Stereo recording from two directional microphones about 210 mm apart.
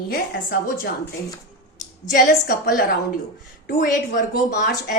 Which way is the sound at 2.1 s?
45° left (ahead or behind).